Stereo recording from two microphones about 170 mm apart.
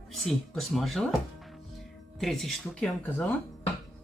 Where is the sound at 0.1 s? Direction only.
Centre (ahead or behind).